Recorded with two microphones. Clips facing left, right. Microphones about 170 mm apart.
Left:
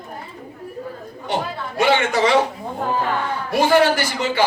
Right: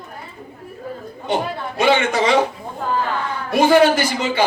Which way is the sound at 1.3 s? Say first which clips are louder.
Right 3 dB; 20° right (ahead or behind).